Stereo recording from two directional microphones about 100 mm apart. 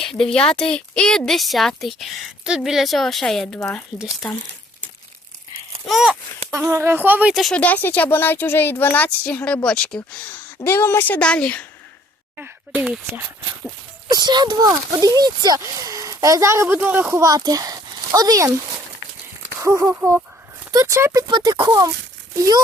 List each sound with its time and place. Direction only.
0.0 s a woman's voice: 5° left (ahead or behind)
3.9 s speech: 5° right (ahead or behind)
5.8 s a woman's voice: centre (ahead or behind)
6.6 s speech: 25° right (ahead or behind)
7.5 s speech: 15° left (ahead or behind)
10.6 s speech: 25° left (ahead or behind)
12.9 s speech: 10° right (ahead or behind)
14.1 s speech: 45° right (ahead or behind); by 16.6 s 30° right (ahead or behind)
16.6 s speech: 20° right (ahead or behind); by 18.5 s 40° right (ahead or behind)
19.5 s speech: 30° right (ahead or behind)
21.2 s speech: 50° right (ahead or behind)